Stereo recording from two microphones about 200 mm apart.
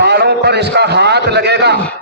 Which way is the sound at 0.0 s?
55° right (ahead or behind).